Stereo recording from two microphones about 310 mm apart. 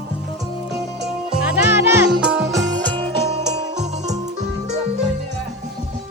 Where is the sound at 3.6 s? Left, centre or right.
Right.